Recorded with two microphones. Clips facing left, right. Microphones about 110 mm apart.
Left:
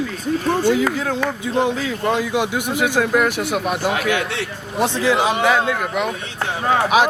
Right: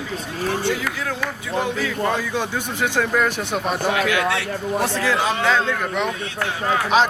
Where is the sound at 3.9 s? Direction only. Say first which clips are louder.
Right 2 dB; 30° left (ahead or behind).